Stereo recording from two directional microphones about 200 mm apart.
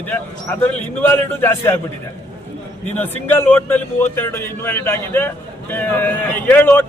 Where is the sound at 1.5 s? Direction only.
10° left (ahead or behind).